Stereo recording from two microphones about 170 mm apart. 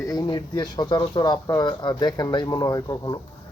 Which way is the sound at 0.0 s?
20° left (ahead or behind).